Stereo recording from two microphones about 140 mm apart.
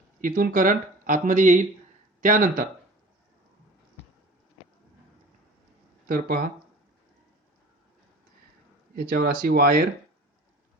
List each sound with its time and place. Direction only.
0.2 s speech: 75° right (ahead or behind)
6.1 s speech: 90° right
9.0 s speech: 90° right